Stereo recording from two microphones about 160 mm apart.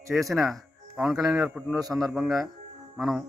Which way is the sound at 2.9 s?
Centre (ahead or behind).